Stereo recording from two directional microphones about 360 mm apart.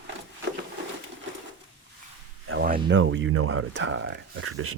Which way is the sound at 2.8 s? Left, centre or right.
Right.